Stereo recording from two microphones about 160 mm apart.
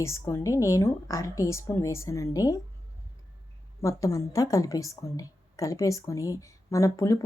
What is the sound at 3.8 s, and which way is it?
A woman's voice, 20° left (ahead or behind).